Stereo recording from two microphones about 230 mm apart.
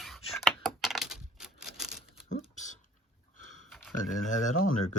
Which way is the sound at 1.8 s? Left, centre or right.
Centre.